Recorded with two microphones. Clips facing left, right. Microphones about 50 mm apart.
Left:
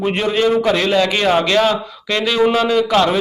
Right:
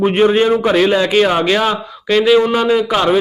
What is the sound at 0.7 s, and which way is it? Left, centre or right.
Speech, centre.